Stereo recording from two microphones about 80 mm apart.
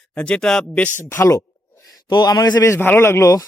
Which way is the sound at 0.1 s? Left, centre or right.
Centre.